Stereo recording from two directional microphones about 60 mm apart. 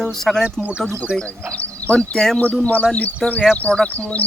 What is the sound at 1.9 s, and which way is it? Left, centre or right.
Speech, centre.